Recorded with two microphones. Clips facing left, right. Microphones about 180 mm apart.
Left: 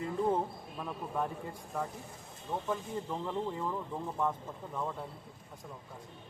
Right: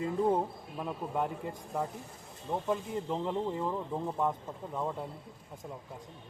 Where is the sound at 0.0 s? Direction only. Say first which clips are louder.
Right 2 dB; 15° right (ahead or behind).